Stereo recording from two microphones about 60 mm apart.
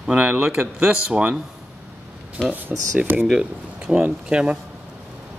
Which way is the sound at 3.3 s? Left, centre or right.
Centre.